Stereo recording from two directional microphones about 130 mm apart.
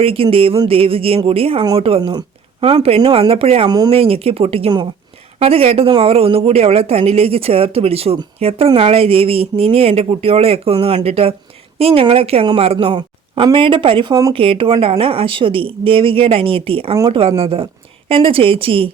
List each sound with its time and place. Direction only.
0.0 s a woman's voice: 45° right (ahead or behind)
3.7 s speech: 30° right (ahead or behind)
3.9 s a woman's voice: 50° right (ahead or behind)